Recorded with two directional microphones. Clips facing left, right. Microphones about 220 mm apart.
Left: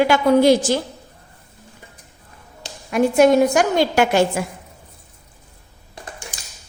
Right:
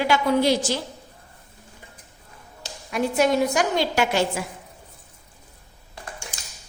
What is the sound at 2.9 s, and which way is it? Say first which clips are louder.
A woman's voice: left 7 dB; 50° left (ahead or behind).